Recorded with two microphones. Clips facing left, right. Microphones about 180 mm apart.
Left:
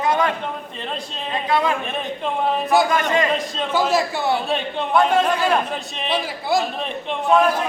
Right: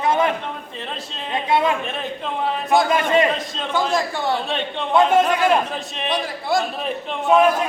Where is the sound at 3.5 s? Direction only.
5° left (ahead or behind).